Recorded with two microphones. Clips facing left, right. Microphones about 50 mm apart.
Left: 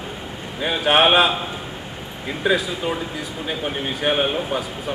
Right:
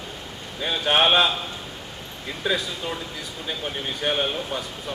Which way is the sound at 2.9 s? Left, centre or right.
Left.